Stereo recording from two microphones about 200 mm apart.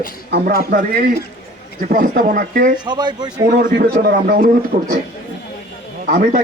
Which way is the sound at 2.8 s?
20° right (ahead or behind).